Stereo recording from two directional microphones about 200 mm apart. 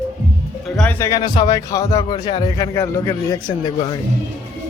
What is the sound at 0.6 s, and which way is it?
A man's voice, 5° left (ahead or behind).